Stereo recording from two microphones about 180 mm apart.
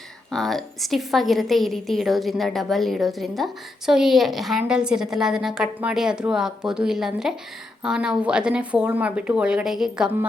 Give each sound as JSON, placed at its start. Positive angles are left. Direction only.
{"t": 0.3, "sound": "a woman's voice", "side_deg": 0}